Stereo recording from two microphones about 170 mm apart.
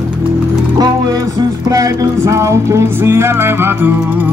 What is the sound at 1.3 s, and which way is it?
Music, 20° right (ahead or behind).